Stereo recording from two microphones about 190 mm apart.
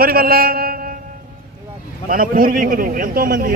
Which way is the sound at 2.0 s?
50° right (ahead or behind).